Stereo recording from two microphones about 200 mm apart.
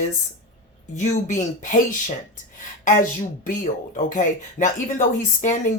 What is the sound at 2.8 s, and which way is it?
Speech, 40° left (ahead or behind).